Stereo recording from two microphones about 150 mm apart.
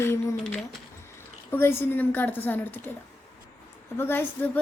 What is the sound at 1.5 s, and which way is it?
Speech, 15° left (ahead or behind).